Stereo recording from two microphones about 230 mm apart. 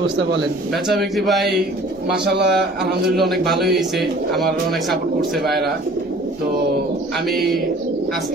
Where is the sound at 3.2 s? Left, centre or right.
Centre.